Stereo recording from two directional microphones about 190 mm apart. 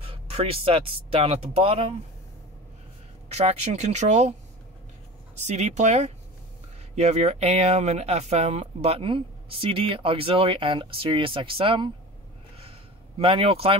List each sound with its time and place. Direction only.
0.0 s speech: 30° right (ahead or behind)
3.3 s speech: 35° right (ahead or behind)
13.2 s speech: 30° right (ahead or behind)